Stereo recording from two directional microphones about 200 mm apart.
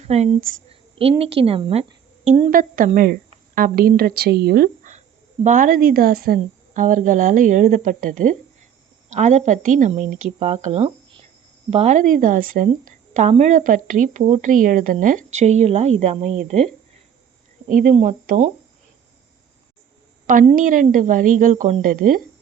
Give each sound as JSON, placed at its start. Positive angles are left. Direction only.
{"t": 0.0, "sound": "speech", "side_deg": -30}
{"t": 0.7, "sound": "a sound", "side_deg": -30}
{"t": 1.2, "sound": "a woman's voice", "side_deg": -30}
{"t": 17.7, "sound": "speech", "side_deg": -40}
{"t": 20.2, "sound": "a woman's voice", "side_deg": -40}